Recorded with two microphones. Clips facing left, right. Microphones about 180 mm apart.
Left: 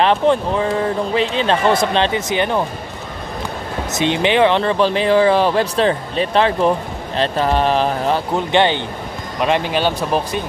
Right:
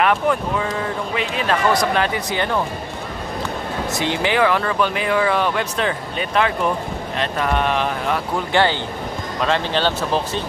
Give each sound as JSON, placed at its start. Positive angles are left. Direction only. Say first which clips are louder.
{"t": 0.0, "sound": "speech", "louder": "left 4 dB", "side_deg": 30}
{"t": 3.9, "sound": "speech", "louder": "left 5 dB", "side_deg": 20}
{"t": 8.4, "sound": "speech", "louder": "left 1 dB", "side_deg": 20}